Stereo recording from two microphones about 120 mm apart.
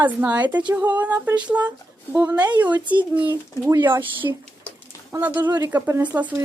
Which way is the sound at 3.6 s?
25° left (ahead or behind).